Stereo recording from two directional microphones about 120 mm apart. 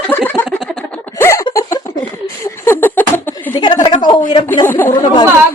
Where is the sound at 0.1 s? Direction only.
15° left (ahead or behind); by 1.9 s 35° left (ahead or behind).